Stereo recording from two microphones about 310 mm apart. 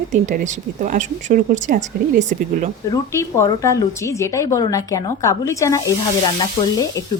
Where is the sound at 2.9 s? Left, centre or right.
Centre.